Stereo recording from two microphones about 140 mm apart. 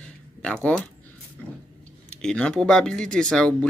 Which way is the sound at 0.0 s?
5° left (ahead or behind).